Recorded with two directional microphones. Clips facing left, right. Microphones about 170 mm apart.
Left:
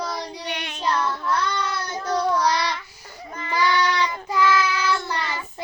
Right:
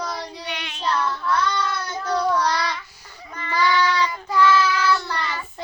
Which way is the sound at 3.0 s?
45° left (ahead or behind).